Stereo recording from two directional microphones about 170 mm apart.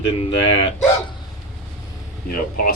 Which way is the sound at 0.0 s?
35° left (ahead or behind).